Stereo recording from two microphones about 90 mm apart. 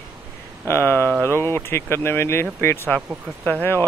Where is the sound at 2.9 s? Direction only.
15° left (ahead or behind).